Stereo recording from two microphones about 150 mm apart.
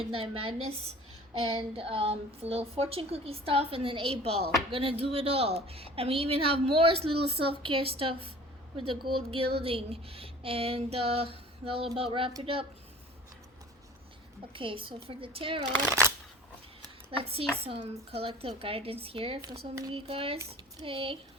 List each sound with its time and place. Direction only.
0.0 s speech: 40° right (ahead or behind)
14.5 s speech: 35° right (ahead or behind)
17.1 s speech: 40° right (ahead or behind)